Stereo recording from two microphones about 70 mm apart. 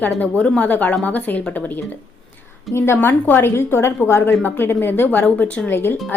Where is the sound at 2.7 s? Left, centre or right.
Left.